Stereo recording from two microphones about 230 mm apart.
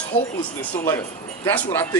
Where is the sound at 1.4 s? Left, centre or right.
Centre.